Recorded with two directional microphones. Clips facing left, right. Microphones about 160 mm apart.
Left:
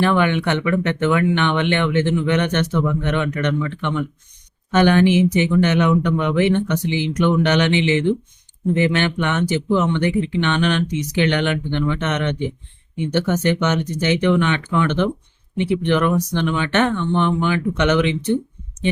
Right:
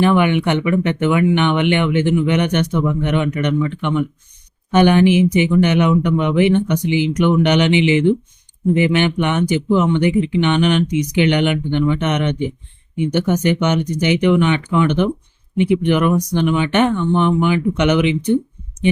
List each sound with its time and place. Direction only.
0.0 s speech: 15° right (ahead or behind)